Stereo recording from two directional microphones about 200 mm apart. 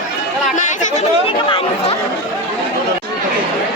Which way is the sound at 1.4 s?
25° left (ahead or behind).